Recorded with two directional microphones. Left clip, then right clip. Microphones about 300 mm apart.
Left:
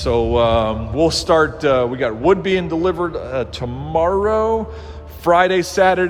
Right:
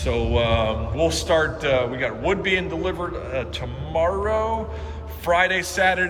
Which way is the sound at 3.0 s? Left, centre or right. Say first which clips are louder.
Left 6 dB; left.